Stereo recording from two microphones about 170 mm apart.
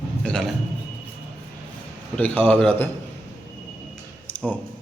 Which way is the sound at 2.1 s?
10° left (ahead or behind).